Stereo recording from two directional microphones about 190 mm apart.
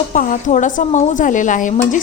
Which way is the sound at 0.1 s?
45° left (ahead or behind).